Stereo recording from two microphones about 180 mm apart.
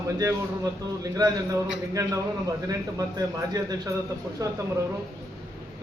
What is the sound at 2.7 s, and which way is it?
A man's voice, 20° right (ahead or behind).